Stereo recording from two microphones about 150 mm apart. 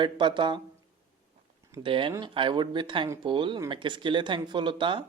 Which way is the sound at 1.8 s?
35° right (ahead or behind).